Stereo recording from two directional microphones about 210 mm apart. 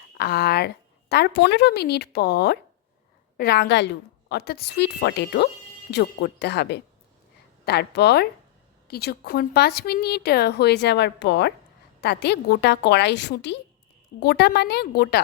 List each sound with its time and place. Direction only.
0.2 s a woman's voice: 50° left (ahead or behind)